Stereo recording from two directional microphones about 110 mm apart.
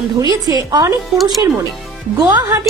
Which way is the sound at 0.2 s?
35° right (ahead or behind).